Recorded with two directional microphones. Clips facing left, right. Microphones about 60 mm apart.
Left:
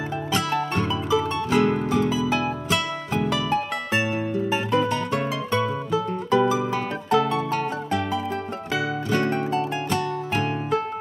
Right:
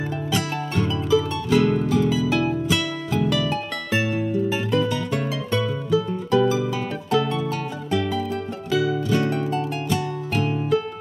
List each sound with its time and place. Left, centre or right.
0.3 s music: left
8.7 s music: left
9.2 s music: left